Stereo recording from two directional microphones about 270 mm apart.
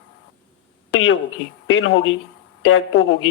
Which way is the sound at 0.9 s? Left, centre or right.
Left.